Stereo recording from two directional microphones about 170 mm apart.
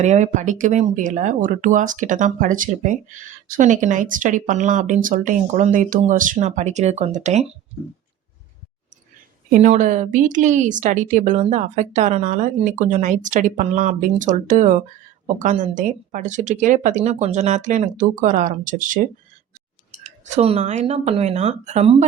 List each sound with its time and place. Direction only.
0.0 s speech: 45° right (ahead or behind)
9.5 s speech: 45° right (ahead or behind)
20.1 s speech: 45° right (ahead or behind)